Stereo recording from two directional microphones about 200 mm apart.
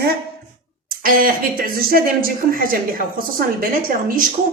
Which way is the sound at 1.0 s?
45° right (ahead or behind).